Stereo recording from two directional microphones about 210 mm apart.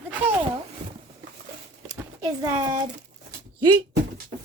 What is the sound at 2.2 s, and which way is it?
Speech, 20° right (ahead or behind).